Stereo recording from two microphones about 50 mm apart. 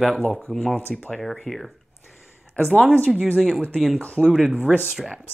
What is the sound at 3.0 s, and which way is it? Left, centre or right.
Speech, right.